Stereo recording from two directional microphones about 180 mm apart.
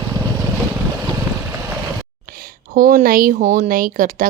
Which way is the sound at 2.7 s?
50° right (ahead or behind).